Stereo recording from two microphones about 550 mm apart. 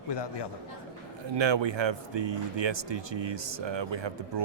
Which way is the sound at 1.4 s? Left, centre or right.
Right.